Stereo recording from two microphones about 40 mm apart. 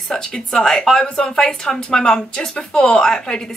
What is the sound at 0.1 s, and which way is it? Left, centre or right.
Speech, centre.